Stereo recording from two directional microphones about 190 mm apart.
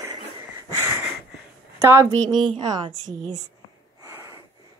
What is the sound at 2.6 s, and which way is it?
Speech, 20° right (ahead or behind).